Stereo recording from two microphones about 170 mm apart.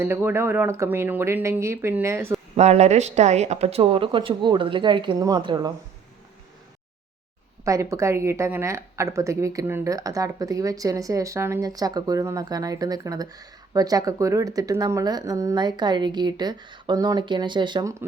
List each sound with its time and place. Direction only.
0.0 s speech: 15° right (ahead or behind)
2.6 s speech: 40° right (ahead or behind); by 5.7 s 25° right (ahead or behind)
7.6 s speech: 20° right (ahead or behind)